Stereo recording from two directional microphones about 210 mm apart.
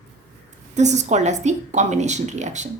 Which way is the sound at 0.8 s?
35° right (ahead or behind).